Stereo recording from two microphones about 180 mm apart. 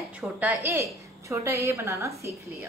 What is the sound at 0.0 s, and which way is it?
A woman's voice, 5° right (ahead or behind).